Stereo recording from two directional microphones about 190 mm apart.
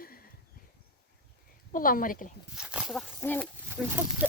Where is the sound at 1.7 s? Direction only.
45° left (ahead or behind).